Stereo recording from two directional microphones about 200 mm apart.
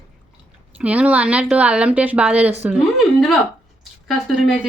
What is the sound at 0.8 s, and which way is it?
A woman's voice, 5° right (ahead or behind).